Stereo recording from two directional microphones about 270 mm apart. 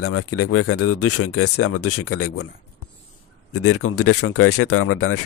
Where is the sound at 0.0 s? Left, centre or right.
Left.